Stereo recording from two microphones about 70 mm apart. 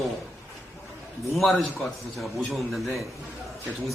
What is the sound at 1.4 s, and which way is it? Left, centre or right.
A man's voice, centre.